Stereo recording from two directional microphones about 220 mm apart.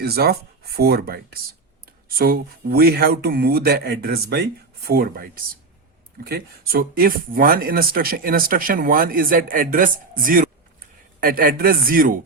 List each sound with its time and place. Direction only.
0.0 s speech: 45° right (ahead or behind)